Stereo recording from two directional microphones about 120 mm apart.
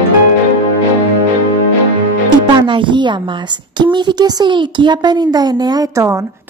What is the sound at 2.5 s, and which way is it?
A woman's voice, 40° right (ahead or behind).